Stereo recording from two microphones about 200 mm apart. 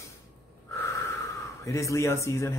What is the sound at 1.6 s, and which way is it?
Speech, 15° left (ahead or behind).